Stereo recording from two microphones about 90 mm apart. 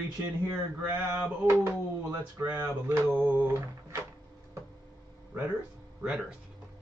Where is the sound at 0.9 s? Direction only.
20° right (ahead or behind).